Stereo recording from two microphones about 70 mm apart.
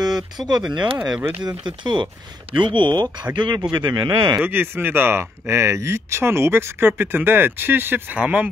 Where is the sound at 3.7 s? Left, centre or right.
Right.